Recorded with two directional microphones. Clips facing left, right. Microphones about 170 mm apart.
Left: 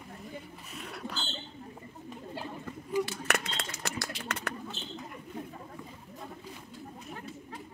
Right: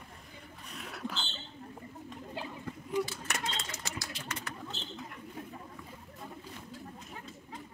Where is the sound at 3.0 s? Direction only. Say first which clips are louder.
Left 3 dB; 65° left (ahead or behind).